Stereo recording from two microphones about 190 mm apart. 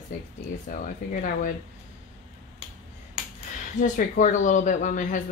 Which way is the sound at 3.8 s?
40° left (ahead or behind).